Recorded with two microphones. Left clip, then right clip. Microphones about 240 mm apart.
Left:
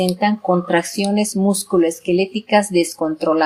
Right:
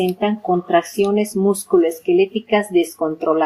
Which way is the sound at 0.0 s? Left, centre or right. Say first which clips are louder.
Left 2 dB; left.